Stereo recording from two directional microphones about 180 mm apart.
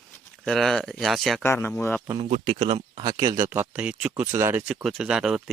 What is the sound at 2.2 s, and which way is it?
Speech, 35° right (ahead or behind).